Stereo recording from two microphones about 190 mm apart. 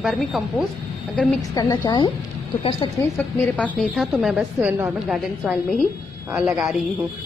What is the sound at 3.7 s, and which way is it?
A woman's voice, centre (ahead or behind).